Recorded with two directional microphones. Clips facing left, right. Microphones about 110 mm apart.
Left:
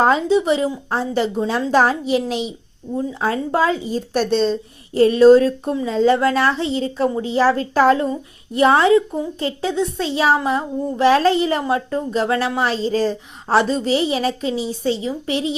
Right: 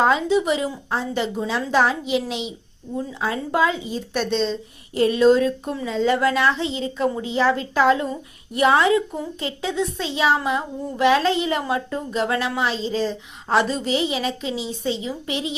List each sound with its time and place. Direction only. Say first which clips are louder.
0.0 s a woman's voice: left 3 dB; 35° left (ahead or behind)
12.5 s a woman's voice: left 4 dB; 45° left (ahead or behind)
13.6 s a woman's voice: left 4 dB; 30° left (ahead or behind)